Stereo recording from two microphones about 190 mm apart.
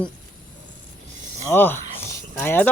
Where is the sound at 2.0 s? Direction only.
10° left (ahead or behind).